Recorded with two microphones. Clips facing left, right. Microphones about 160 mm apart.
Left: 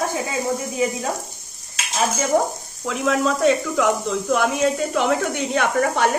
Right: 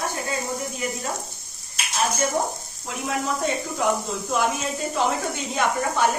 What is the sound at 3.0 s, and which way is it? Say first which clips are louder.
Speech: left 8 dB; 90° left.